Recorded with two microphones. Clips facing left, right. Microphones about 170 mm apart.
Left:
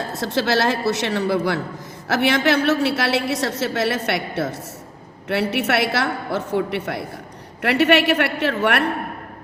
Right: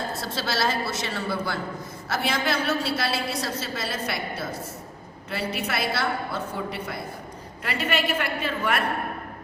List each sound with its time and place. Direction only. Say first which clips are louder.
0.2 s a woman's voice: left 10 dB; 75° left (ahead or behind)